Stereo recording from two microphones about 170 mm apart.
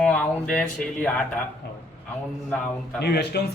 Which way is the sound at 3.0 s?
70° left (ahead or behind).